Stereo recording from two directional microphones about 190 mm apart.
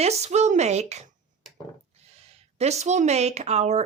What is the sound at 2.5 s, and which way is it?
Speech, 35° right (ahead or behind).